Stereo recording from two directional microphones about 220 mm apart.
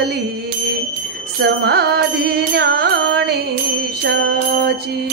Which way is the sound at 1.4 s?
45° right (ahead or behind).